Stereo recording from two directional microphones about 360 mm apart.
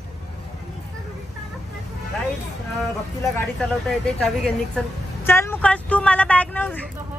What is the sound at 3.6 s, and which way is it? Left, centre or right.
Speech, centre.